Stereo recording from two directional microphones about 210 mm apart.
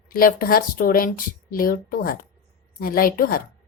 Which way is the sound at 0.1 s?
45° left (ahead or behind).